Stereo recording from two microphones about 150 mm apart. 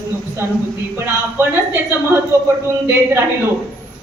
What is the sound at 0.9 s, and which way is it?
Speech, 15° right (ahead or behind).